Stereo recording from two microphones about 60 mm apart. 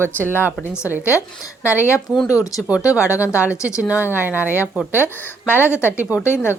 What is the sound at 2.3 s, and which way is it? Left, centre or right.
Speech, left.